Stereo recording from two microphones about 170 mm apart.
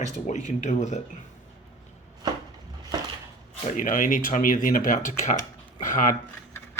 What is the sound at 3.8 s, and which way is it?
Speech, 50° left (ahead or behind).